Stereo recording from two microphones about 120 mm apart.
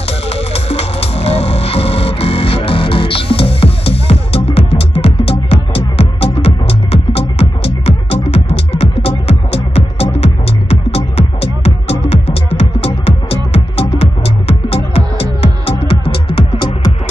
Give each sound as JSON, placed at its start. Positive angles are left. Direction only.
{"t": 0.3, "sound": "music", "side_deg": 55}